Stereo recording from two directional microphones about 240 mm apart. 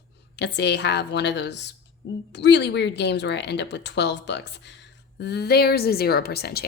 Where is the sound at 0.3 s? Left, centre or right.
Left.